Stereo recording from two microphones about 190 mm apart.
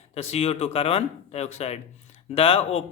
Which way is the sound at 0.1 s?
30° left (ahead or behind).